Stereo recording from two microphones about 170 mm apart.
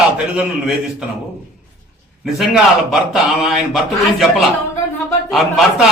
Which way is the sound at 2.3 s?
Centre (ahead or behind).